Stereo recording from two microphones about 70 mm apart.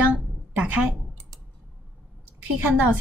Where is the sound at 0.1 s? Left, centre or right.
Centre.